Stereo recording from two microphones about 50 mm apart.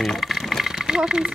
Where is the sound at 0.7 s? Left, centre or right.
Centre.